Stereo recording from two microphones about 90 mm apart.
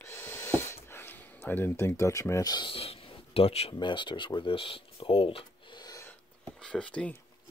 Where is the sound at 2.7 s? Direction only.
90° left.